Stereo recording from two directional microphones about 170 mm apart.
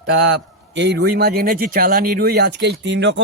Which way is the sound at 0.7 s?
90° right.